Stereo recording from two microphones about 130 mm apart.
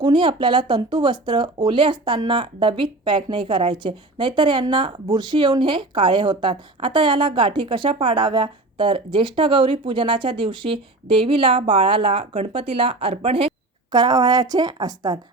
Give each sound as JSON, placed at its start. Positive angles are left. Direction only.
{"t": 0.0, "sound": "speech", "side_deg": -35}
{"t": 13.9, "sound": "a woman's voice", "side_deg": -30}